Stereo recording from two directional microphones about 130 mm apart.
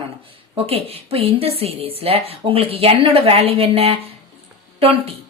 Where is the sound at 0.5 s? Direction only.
50° right (ahead or behind).